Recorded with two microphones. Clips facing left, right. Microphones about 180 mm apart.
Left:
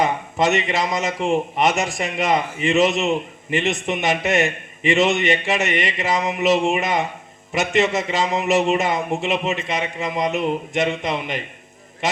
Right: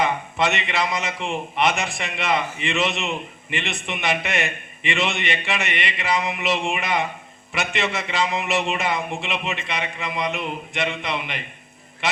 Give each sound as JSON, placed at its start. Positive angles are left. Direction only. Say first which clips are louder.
{"t": 0.0, "sound": "a man's voice", "louder": "left 3 dB", "side_deg": 40}